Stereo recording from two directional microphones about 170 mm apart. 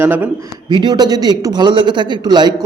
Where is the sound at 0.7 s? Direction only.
25° right (ahead or behind).